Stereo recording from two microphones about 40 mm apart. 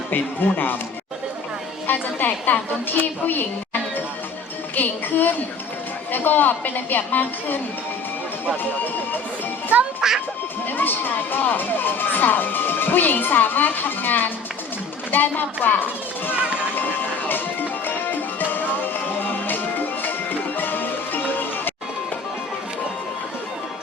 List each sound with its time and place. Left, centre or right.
0.1 s speech: left
1.9 s a woman's voice: left
4.7 s a woman's voice: left
8.6 s speech: left
9.7 s speech: right
10.7 s speech: left
16.7 s music: left